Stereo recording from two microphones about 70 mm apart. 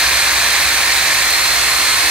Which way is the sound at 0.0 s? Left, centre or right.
Centre.